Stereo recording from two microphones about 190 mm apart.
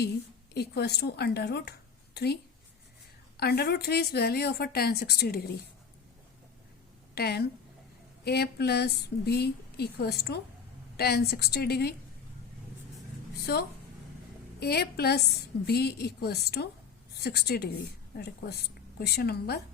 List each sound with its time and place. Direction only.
0.5 s a woman's voice: 60° left (ahead or behind)
7.2 s speech: 55° left (ahead or behind)
13.5 s speech: 60° left (ahead or behind)